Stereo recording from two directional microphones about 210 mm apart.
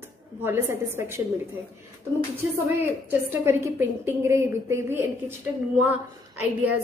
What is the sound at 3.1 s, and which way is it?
A woman's voice, 10° right (ahead or behind).